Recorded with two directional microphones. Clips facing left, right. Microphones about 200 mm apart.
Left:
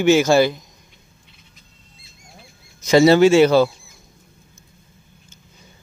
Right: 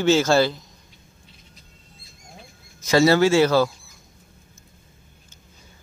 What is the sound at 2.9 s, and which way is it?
Speech, 20° left (ahead or behind).